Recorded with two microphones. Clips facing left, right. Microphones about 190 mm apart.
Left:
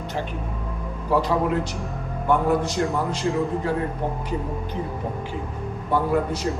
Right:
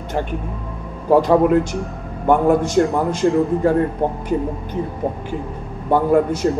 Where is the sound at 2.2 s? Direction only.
50° right (ahead or behind).